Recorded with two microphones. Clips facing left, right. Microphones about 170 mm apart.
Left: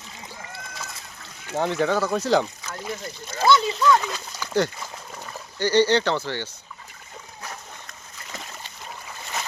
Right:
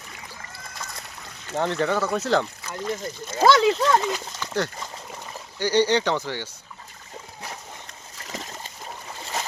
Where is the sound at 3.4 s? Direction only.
90° right.